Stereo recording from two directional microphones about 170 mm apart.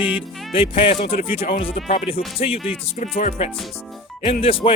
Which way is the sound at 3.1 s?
60° left (ahead or behind).